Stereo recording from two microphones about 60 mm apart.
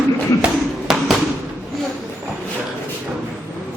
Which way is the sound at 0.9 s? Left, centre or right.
Centre.